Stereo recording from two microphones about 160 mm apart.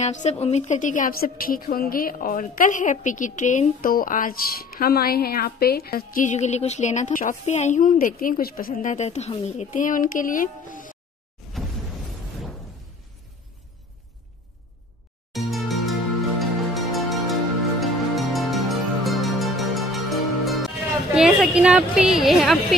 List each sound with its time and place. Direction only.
0.0 s a woman's voice: 45° left (ahead or behind); by 8.9 s 65° left (ahead or behind)
8.9 s speech: 45° left (ahead or behind)
9.8 s a woman's voice: 55° left (ahead or behind)
11.4 s a sound: centre (ahead or behind)
15.3 s music: centre (ahead or behind)
21.1 s a woman's voice: 5° right (ahead or behind)